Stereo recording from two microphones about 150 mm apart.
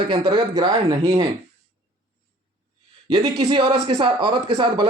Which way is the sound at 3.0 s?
30° right (ahead or behind).